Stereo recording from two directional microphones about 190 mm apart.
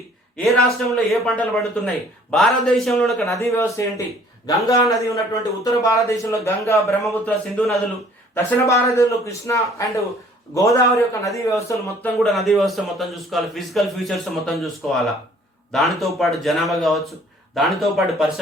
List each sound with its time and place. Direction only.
0.3 s a man's voice: centre (ahead or behind)
3.2 s a man's voice: 15° left (ahead or behind)
7.0 s a man's voice: 5° left (ahead or behind)
8.4 s a man's voice: 15° left (ahead or behind)
12.0 s a man's voice: centre (ahead or behind)